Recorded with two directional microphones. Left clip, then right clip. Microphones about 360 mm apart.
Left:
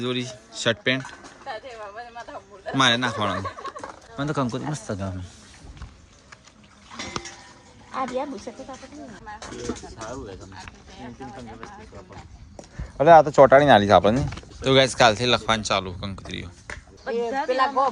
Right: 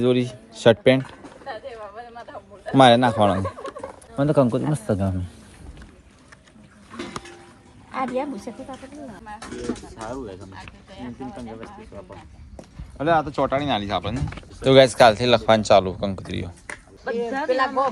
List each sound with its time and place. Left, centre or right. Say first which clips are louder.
0.0 s speech: right 7 dB; centre
1.5 s a sound: right 1 dB; left
2.7 s speech: right 6 dB; centre
4.9 s a man's voice: right 9 dB; right
7.9 s a sound: right 2 dB; right
9.7 s a sound: right 2 dB; right
13.0 s speech: left 8 dB; left
14.3 s speech: right 10 dB; centre
17.2 s speech: even; left